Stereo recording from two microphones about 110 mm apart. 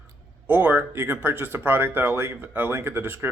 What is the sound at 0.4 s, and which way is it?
Speech, 15° right (ahead or behind).